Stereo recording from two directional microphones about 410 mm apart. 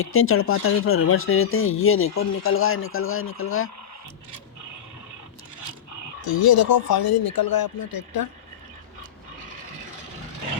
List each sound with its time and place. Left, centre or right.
0.0 s speech: left
6.2 s speech: left